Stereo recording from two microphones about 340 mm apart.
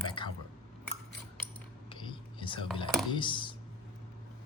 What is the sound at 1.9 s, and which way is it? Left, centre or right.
Whispering, centre.